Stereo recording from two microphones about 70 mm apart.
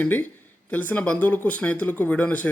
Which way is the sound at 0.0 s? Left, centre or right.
Left.